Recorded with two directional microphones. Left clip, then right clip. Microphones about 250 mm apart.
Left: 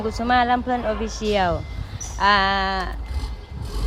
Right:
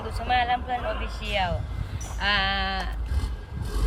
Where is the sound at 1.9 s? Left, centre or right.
Centre.